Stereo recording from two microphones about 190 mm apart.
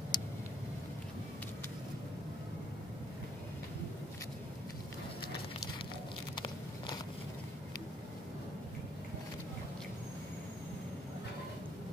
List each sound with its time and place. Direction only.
0.1 s vehicle: 20° left (ahead or behind)
6.3 s biting: 20° left (ahead or behind)